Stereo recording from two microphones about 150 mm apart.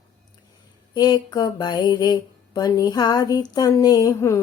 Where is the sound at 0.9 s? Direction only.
25° left (ahead or behind).